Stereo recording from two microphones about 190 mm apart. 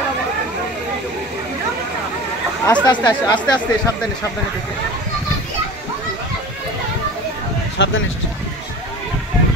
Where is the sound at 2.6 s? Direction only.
20° left (ahead or behind).